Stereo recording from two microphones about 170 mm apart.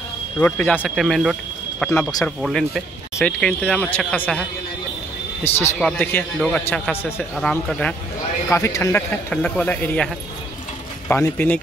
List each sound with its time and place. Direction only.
0.4 s speech: 10° left (ahead or behind)
5.4 s speech: 15° left (ahead or behind)
8.5 s speech: 15° left (ahead or behind)
9.3 s speech: 5° left (ahead or behind)
11.1 s speech: 10° left (ahead or behind)